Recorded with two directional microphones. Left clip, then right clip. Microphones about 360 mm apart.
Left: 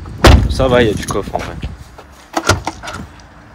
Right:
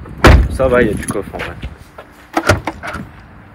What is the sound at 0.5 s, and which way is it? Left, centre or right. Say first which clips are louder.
Speech: even; left.